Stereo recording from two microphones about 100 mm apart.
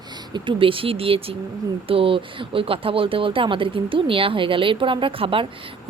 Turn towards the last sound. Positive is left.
turn(degrees=-60)  # may be behind; listen again after turning